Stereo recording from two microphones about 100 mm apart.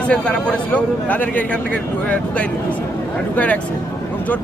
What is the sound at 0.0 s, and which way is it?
A man's voice, 10° left (ahead or behind).